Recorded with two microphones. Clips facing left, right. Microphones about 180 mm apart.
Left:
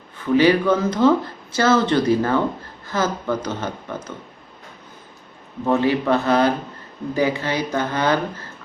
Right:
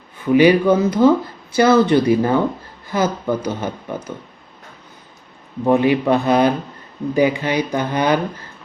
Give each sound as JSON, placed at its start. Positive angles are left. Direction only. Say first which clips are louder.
{"t": 0.3, "sound": "speech", "louder": "right 3 dB", "side_deg": -10}
{"t": 5.6, "sound": "speech", "louder": "right 3 dB", "side_deg": -15}